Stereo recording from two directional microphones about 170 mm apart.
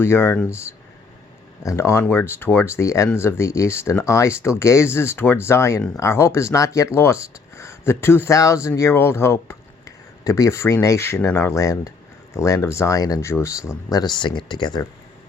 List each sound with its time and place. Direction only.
0.0 s speech: 15° left (ahead or behind)
1.6 s speech: 15° left (ahead or behind)